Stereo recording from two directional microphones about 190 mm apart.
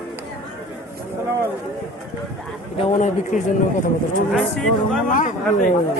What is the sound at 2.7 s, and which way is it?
Speech, 40° left (ahead or behind).